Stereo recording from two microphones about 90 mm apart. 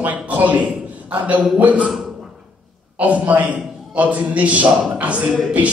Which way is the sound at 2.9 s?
15° right (ahead or behind).